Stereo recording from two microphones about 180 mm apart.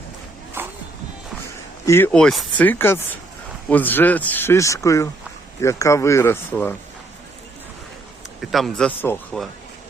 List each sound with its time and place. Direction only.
0.6 s music: 10° right (ahead or behind)
1.8 s speech: 15° left (ahead or behind)
2.1 s speech: centre (ahead or behind)
2.6 s speech: 15° left (ahead or behind)
8.4 s speech: centre (ahead or behind)